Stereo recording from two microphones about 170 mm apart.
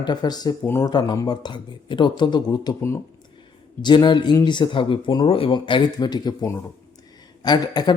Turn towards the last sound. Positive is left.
turn(degrees=25)  # may be behind; listen again after turning